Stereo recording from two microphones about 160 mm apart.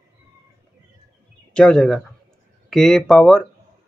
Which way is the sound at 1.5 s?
5° left (ahead or behind).